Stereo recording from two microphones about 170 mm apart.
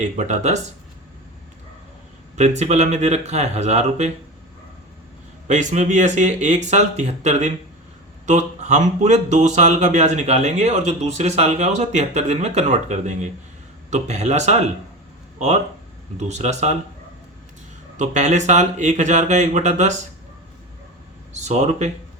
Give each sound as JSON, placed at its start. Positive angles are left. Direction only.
{"t": 0.0, "sound": "speech", "side_deg": -45}
{"t": 2.3, "sound": "speech", "side_deg": -40}
{"t": 5.5, "sound": "speech", "side_deg": -45}
{"t": 16.1, "sound": "speech", "side_deg": -40}
{"t": 17.9, "sound": "speech", "side_deg": -45}
{"t": 21.3, "sound": "speech", "side_deg": -45}